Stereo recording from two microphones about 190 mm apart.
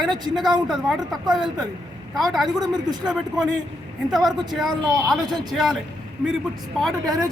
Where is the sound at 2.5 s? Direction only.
20° right (ahead or behind).